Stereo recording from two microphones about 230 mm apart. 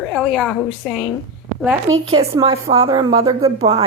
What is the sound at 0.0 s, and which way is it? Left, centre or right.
A woman's voice, centre.